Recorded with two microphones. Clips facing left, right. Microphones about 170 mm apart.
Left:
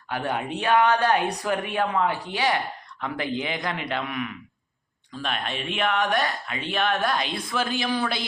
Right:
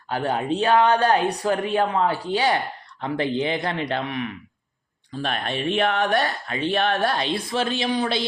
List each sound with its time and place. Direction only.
0.1 s speech: 30° right (ahead or behind)